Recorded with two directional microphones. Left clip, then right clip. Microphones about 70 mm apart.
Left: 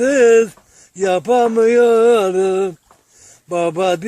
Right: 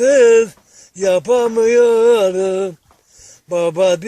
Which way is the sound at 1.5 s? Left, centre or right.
Left.